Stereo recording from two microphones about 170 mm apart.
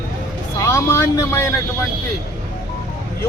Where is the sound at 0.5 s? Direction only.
15° left (ahead or behind).